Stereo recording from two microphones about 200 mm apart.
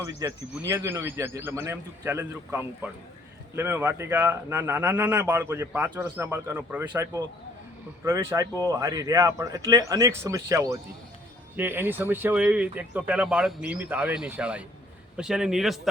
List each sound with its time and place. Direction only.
0.0 s a man's voice: 15° right (ahead or behind)